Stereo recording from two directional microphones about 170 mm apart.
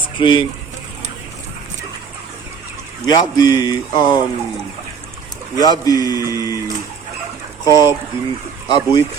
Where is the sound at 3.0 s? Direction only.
20° left (ahead or behind).